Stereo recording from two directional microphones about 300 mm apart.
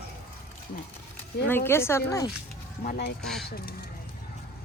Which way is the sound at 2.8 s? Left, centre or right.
Left.